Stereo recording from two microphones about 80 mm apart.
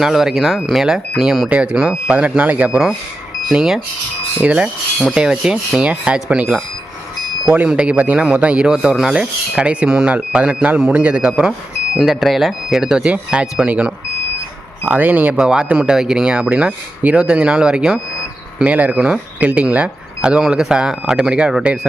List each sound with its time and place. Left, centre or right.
0.0 s speech: centre